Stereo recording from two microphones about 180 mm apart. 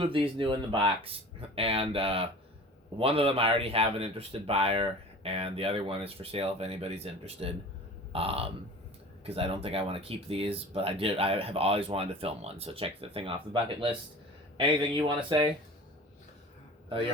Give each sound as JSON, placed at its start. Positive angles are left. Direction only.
{"t": 0.0, "sound": "speech", "side_deg": -30}